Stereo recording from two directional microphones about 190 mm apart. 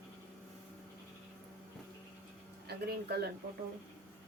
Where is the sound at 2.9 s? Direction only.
55° right (ahead or behind).